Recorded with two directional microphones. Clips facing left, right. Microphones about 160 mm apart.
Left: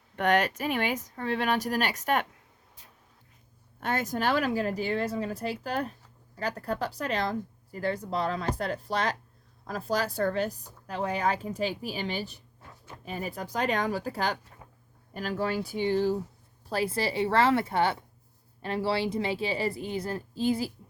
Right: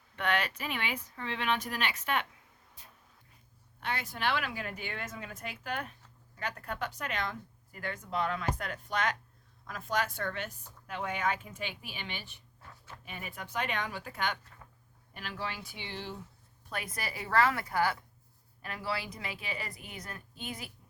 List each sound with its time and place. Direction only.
0.2 s speech: 45° left (ahead or behind)
3.8 s a woman's voice: 45° left (ahead or behind)